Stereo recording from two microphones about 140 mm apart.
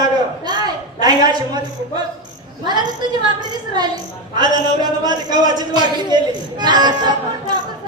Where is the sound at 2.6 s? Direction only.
30° right (ahead or behind).